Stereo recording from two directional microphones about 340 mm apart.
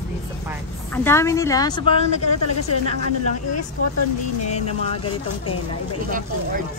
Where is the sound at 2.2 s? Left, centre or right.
Left.